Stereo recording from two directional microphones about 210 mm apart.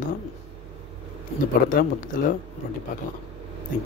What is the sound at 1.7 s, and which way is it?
Speech, 40° left (ahead or behind).